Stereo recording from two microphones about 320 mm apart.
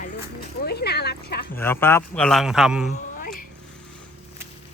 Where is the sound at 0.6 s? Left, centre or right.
Left.